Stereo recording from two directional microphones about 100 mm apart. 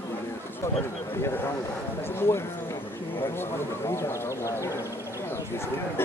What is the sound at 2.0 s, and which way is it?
Speech, 25° left (ahead or behind).